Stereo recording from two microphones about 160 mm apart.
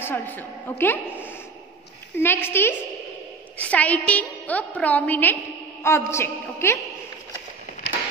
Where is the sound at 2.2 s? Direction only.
15° left (ahead or behind).